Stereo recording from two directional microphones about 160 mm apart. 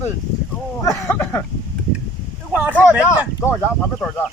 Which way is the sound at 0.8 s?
20° left (ahead or behind).